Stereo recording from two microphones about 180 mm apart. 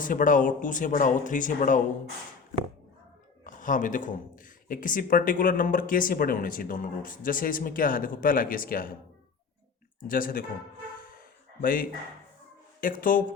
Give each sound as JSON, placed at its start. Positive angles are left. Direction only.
{"t": 0.0, "sound": "speech", "side_deg": 50}
{"t": 3.4, "sound": "speech", "side_deg": 45}
{"t": 10.1, "sound": "speech", "side_deg": 50}
{"t": 10.9, "sound": "a sound", "side_deg": 50}
{"t": 12.8, "sound": "speech", "side_deg": 50}